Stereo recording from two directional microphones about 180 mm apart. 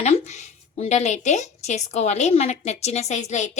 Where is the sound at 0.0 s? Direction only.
40° left (ahead or behind).